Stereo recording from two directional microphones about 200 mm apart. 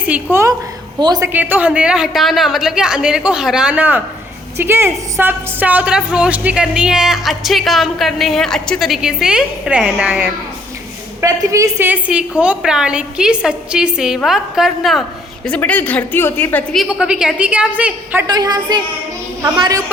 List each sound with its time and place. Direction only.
0.1 s a woman's voice: 10° right (ahead or behind)
0.9 s a woman's voice: 20° right (ahead or behind)
1.3 s a woman's voice: 10° right (ahead or behind)
18.3 s a woman's voice: 20° right (ahead or behind)